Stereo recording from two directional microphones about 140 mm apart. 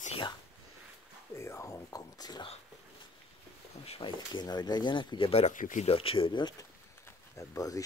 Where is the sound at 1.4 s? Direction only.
20° left (ahead or behind).